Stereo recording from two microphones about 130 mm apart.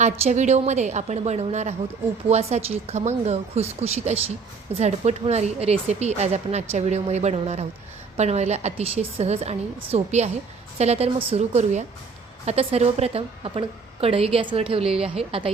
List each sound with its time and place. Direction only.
0.0 s a woman's voice: 65° right (ahead or behind); by 15.5 s 45° right (ahead or behind)